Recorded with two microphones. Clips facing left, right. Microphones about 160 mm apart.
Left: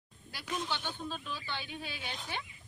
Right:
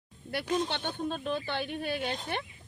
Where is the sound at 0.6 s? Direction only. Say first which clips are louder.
Right 5 dB; 60° right (ahead or behind).